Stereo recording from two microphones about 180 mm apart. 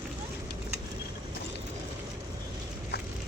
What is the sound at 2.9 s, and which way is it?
Vehicle, 65° left (ahead or behind).